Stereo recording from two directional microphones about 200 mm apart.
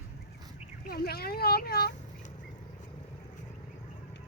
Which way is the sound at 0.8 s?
50° left (ahead or behind).